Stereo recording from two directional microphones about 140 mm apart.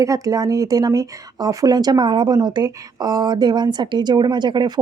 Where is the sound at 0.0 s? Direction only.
25° right (ahead or behind).